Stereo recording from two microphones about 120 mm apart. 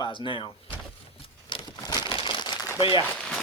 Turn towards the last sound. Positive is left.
turn(degrees=0)  # may be behind; listen again after turning